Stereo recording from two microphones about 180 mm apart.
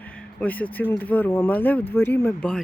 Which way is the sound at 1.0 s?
10° left (ahead or behind).